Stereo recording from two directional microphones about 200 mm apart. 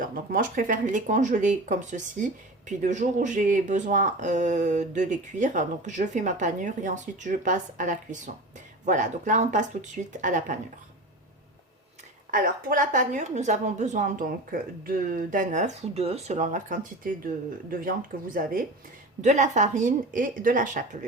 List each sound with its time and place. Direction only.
0.0 s speech: 45° right (ahead or behind)
12.3 s speech: 45° right (ahead or behind)
19.2 s speech: 35° right (ahead or behind)